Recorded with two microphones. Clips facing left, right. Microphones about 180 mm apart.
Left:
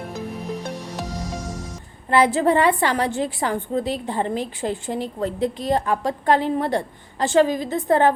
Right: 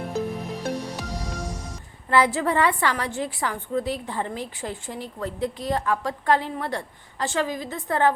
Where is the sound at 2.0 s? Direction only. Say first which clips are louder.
Left 4 dB; 20° left (ahead or behind).